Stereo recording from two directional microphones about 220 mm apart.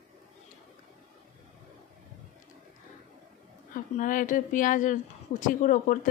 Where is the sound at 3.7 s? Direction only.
35° left (ahead or behind).